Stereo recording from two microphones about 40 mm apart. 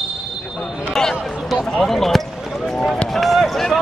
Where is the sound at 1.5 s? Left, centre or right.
Centre.